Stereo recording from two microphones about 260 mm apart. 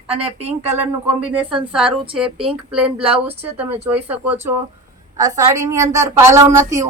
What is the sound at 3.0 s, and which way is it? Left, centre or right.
Speech, right.